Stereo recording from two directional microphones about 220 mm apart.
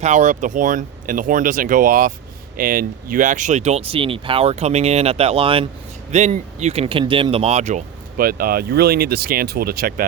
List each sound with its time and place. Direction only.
0.0 s speech: 35° right (ahead or behind)